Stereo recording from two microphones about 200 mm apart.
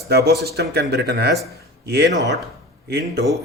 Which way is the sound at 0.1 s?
55° right (ahead or behind).